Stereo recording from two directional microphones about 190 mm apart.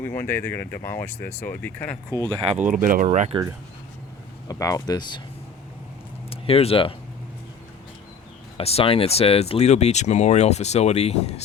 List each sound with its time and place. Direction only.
0.0 s speech: 10° left (ahead or behind)
2.6 s speech: 45° right (ahead or behind)
4.4 s speech: 15° left (ahead or behind)
6.3 s speech: 30° left (ahead or behind)
8.5 s speech: 30° left (ahead or behind)